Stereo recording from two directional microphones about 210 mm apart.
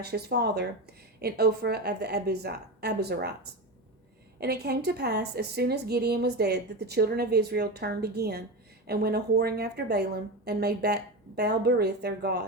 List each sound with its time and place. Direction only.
0.0 s a woman's voice: 50° right (ahead or behind)
4.4 s a woman's voice: 50° right (ahead or behind)